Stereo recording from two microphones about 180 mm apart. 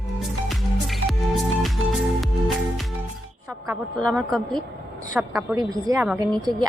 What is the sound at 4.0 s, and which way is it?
A woman's voice, 5° left (ahead or behind).